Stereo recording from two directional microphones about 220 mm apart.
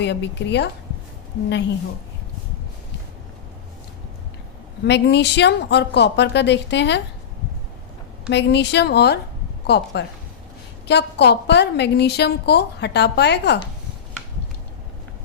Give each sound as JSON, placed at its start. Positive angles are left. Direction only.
{"t": 0.0, "sound": "a woman's voice", "side_deg": 50}
{"t": 4.9, "sound": "a woman's voice", "side_deg": 50}
{"t": 8.3, "sound": "a woman's voice", "side_deg": 50}